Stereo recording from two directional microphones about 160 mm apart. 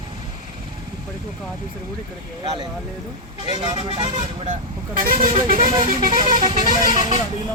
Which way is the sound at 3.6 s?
30° right (ahead or behind).